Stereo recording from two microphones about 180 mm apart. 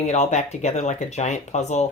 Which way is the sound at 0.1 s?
40° left (ahead or behind).